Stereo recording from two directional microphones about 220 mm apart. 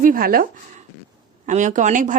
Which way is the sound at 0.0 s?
40° right (ahead or behind).